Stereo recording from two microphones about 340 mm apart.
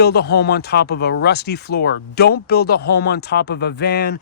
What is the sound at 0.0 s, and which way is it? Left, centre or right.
Speech, left.